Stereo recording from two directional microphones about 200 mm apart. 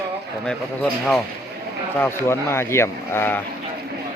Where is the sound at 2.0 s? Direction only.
10° left (ahead or behind).